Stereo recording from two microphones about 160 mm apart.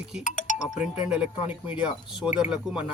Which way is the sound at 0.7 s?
5° right (ahead or behind).